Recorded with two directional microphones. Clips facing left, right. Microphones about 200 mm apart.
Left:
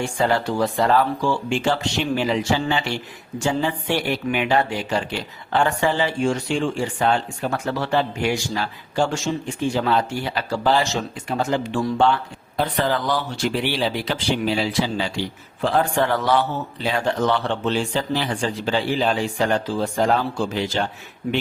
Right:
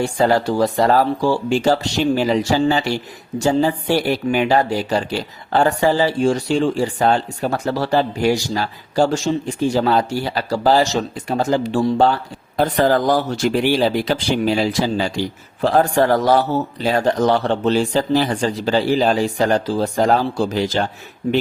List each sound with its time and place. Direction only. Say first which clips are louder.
0.0 s speech: right 5 dB; 40° right (ahead or behind)